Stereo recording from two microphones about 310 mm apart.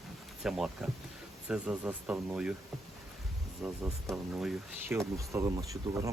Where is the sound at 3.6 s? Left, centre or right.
Centre.